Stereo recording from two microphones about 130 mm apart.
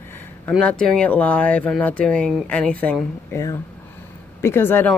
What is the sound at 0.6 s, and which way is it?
Speech, 5° left (ahead or behind).